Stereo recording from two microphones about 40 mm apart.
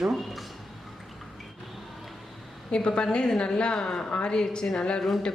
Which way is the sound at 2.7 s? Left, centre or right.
Left.